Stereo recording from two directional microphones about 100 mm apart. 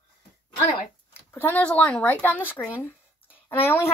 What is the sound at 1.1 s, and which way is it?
Speech, 20° left (ahead or behind).